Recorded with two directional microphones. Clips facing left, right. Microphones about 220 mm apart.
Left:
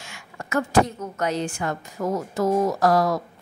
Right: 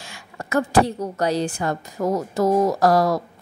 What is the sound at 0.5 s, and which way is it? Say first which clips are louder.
A woman's voice: right 2 dB; 35° right (ahead or behind).